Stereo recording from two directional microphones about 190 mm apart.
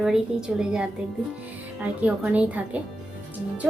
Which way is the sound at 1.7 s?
5° right (ahead or behind).